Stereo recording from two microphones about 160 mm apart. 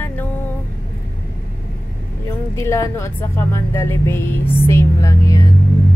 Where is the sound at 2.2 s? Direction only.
15° left (ahead or behind).